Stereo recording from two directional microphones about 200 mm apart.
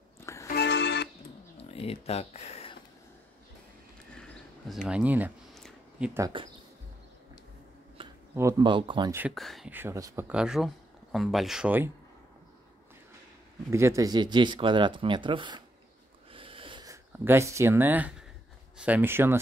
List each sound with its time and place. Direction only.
0.2 s music: 15° left (ahead or behind)
0.5 s music: 55° left (ahead or behind)
1.6 s speech: 30° left (ahead or behind)
4.2 s a sound: centre (ahead or behind)
8.0 s a sound: 25° right (ahead or behind)
8.4 s speech: 15° right (ahead or behind)
9.3 s speech: centre (ahead or behind)
13.7 s speech: 15° right (ahead or behind)
16.3 s a sound: 25° right (ahead or behind); by 18.1 s 10° right (ahead or behind)
18.8 s speech: 10° right (ahead or behind)